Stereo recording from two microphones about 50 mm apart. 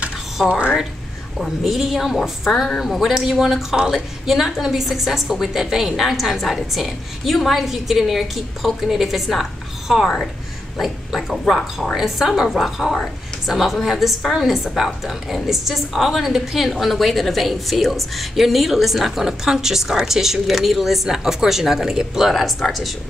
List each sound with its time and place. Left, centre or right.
0.5 s speech: right
1.7 s a woman's voice: centre